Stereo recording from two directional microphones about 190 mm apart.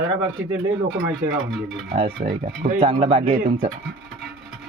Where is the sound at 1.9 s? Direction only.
25° right (ahead or behind).